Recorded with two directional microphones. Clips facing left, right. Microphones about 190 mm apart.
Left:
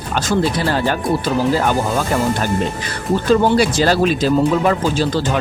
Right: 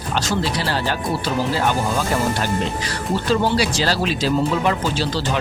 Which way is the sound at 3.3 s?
50° left (ahead or behind).